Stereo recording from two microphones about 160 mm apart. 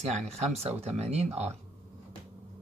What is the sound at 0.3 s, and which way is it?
Speech, 40° right (ahead or behind).